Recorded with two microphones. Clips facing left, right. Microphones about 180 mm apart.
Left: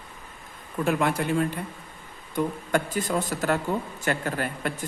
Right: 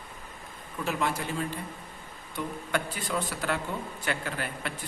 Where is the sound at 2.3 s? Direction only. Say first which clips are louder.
Left 6 dB; 45° left (ahead or behind).